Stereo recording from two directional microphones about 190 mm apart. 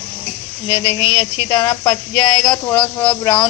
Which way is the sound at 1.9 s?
5° left (ahead or behind).